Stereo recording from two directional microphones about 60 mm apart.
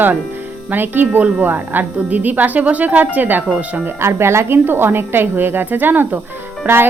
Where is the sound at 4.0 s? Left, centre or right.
Right.